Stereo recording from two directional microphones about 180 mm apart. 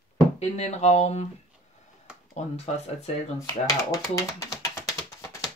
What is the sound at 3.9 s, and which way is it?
Speech, 20° left (ahead or behind).